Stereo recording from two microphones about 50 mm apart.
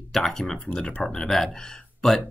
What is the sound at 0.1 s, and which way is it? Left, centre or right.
Speech, centre.